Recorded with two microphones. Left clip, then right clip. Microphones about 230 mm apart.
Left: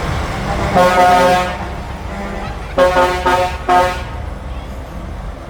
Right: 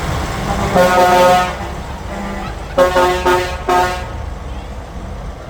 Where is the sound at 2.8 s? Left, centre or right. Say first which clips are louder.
Even; right.